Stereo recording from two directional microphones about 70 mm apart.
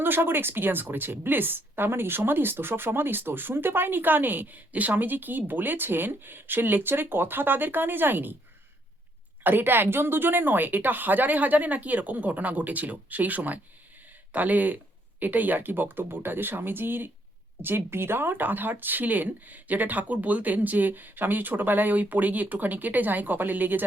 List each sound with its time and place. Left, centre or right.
0.0 s speech: right
9.4 s speech: right